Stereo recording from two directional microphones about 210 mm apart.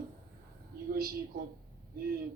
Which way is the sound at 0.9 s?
45° right (ahead or behind).